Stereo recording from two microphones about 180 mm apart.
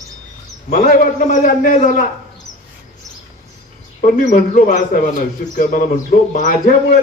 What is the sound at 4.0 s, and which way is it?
A man's voice, 40° left (ahead or behind).